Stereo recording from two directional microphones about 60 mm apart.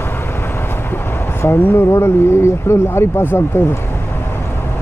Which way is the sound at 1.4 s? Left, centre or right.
Left.